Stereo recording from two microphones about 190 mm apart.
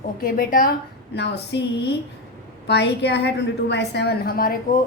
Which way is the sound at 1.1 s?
65° left (ahead or behind).